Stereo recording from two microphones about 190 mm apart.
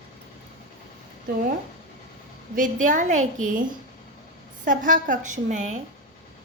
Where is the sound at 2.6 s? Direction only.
40° right (ahead or behind).